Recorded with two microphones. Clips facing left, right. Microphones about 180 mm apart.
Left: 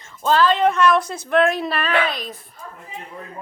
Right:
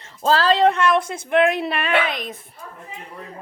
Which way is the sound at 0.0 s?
30° right (ahead or behind).